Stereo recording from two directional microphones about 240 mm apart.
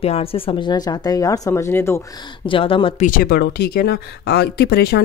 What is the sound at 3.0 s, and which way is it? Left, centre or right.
Speech, left.